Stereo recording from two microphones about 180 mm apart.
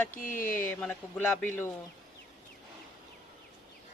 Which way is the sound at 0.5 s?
10° left (ahead or behind).